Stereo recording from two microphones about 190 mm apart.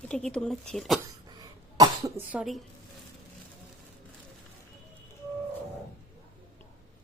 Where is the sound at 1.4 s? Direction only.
20° right (ahead or behind).